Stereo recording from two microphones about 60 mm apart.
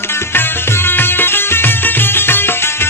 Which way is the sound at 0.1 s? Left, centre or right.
Left.